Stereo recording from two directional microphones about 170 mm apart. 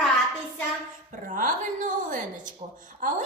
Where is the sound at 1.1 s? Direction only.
50° right (ahead or behind).